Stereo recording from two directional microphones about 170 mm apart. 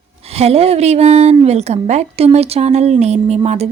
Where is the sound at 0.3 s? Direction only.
35° right (ahead or behind).